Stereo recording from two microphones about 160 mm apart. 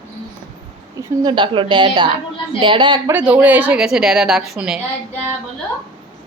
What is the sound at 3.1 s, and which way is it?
A woman's voice, 10° right (ahead or behind).